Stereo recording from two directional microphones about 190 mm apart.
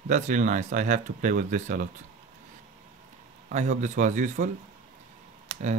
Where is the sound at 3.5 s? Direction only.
40° right (ahead or behind).